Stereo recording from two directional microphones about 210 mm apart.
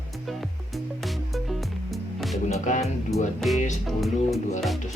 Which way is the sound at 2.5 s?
35° left (ahead or behind).